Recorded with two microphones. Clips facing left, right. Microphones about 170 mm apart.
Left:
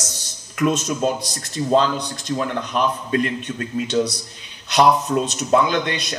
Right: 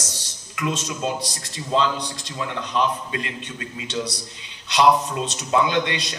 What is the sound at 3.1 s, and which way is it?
Speech, 20° right (ahead or behind).